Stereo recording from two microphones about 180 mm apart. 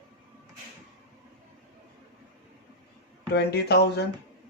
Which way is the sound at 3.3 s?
60° left (ahead or behind).